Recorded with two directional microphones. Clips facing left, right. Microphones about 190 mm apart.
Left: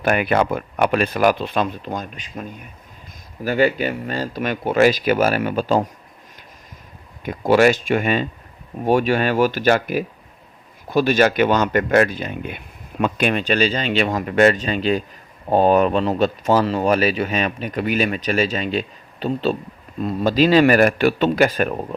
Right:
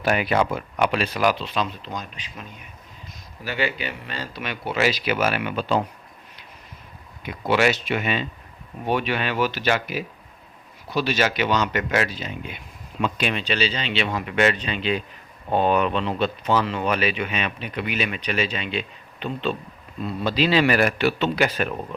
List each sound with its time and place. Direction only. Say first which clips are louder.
0.0 s speech: left 3 dB; 55° left (ahead or behind)
7.2 s speech: left 6 dB; 45° left (ahead or behind)